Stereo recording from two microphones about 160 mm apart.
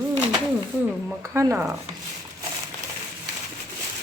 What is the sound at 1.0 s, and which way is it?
Speech, 15° right (ahead or behind).